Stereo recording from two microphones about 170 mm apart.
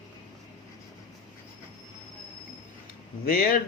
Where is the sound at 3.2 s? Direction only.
60° left (ahead or behind).